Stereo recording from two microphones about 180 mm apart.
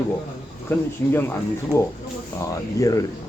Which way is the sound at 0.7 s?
10° left (ahead or behind).